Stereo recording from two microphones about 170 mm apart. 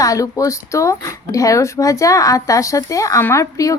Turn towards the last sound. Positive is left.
turn(degrees=20)  # may be behind; listen again after turning